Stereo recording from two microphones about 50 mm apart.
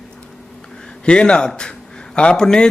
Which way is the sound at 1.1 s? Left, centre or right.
Centre.